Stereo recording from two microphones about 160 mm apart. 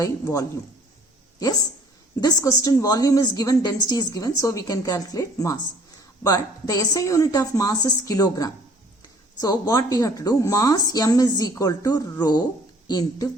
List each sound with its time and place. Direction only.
0.0 s a woman's voice: 20° left (ahead or behind)
2.2 s a woman's voice: 20° left (ahead or behind)